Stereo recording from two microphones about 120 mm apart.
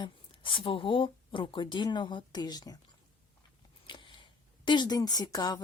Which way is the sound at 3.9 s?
40° left (ahead or behind).